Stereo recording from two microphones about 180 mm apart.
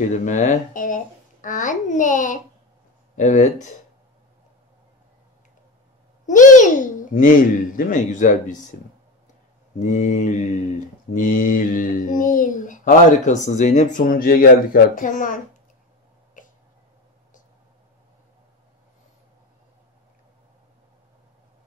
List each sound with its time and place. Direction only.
0.2 s speech: 45° left (ahead or behind)
6.2 s a child's voice: 45° left (ahead or behind)
9.8 s speech: 45° left (ahead or behind)
16.4 s throat clearing: 45° left (ahead or behind)